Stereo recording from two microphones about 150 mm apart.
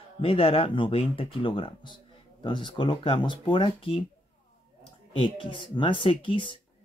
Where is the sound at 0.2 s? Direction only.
40° left (ahead or behind).